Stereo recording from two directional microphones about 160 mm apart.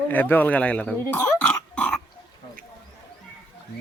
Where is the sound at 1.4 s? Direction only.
5° left (ahead or behind).